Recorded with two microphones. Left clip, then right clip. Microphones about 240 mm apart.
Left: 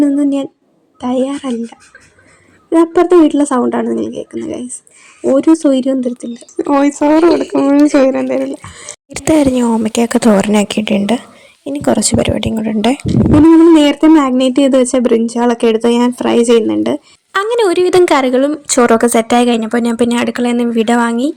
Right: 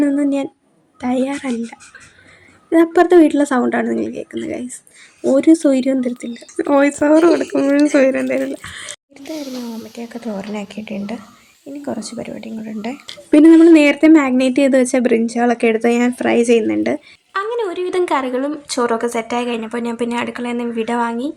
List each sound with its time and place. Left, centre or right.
1.0 s speech: centre
9.1 s speech: left
13.1 s speech: centre
17.3 s a woman's voice: left